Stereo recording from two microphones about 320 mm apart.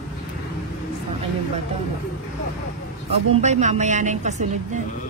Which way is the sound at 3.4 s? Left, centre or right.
Right.